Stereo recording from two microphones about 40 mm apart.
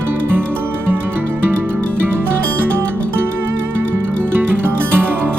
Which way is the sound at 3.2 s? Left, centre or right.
Right.